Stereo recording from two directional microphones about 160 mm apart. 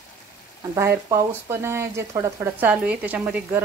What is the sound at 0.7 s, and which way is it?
Speech, 20° right (ahead or behind).